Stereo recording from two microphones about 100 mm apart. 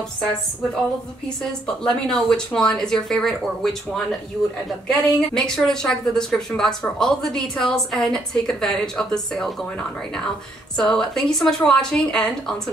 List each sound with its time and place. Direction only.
1.4 s a woman's voice: 5° left (ahead or behind)